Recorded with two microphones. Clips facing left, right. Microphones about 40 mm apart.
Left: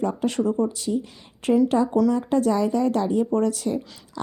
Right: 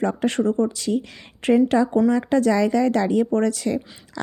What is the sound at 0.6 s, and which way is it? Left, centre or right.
A woman's voice, right.